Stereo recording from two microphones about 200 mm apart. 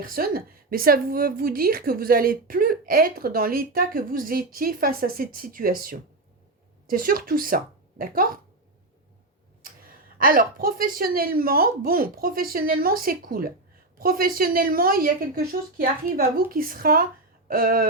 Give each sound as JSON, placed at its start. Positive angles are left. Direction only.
{"t": 0.0, "sound": "a woman's voice", "side_deg": -45}
{"t": 9.8, "sound": "a woman's voice", "side_deg": -45}